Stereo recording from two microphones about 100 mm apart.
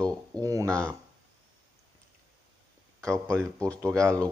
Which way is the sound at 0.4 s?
35° right (ahead or behind).